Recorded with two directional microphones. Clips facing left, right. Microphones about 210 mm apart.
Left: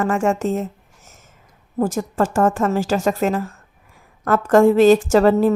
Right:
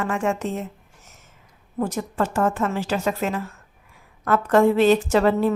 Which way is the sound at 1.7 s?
45° left (ahead or behind).